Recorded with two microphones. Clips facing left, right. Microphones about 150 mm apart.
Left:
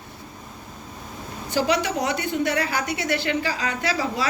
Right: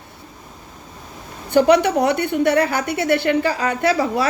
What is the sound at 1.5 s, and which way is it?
A woman's voice, 60° right (ahead or behind).